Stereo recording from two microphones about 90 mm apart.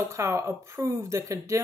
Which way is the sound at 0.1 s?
30° right (ahead or behind).